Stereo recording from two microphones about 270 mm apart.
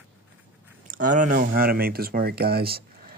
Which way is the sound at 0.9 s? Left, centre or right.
Right.